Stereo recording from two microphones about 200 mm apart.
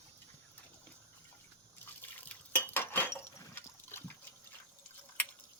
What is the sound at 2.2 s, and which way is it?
Liquid, 10° left (ahead or behind).